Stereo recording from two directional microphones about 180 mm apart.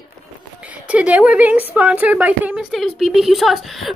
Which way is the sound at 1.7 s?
10° right (ahead or behind).